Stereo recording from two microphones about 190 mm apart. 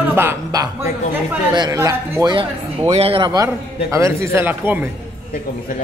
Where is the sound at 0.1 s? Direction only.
10° right (ahead or behind).